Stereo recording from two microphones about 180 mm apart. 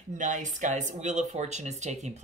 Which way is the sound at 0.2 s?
45° right (ahead or behind).